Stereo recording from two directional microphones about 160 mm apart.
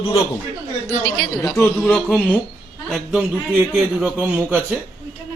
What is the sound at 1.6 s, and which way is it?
A man's voice, 10° left (ahead or behind).